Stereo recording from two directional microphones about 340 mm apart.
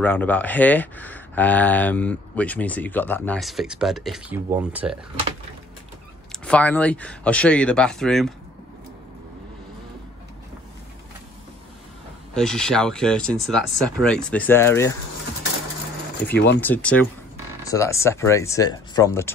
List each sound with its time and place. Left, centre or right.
0.0 s speech: centre
6.4 s speech: centre
12.4 s speech: centre
16.3 s speech: left
16.6 s speech: centre